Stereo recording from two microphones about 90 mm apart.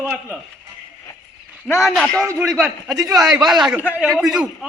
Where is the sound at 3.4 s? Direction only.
5° right (ahead or behind).